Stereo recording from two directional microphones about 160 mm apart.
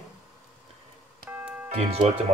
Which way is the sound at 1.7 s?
40° right (ahead or behind).